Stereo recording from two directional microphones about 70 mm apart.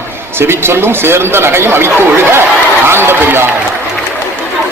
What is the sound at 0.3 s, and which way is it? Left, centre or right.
A man's voice, right.